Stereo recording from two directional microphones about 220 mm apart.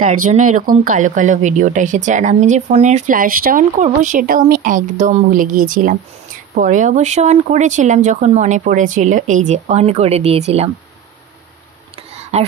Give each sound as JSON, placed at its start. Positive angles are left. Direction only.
{"t": 0.0, "sound": "speech", "side_deg": -35}
{"t": 12.2, "sound": "whispering", "side_deg": -30}